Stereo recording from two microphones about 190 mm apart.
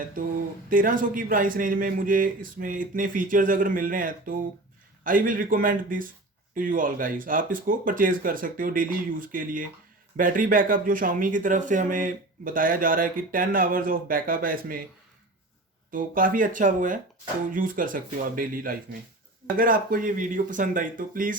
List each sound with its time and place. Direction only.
0.7 s speech: 45° right (ahead or behind)
15.9 s speech: 45° right (ahead or behind)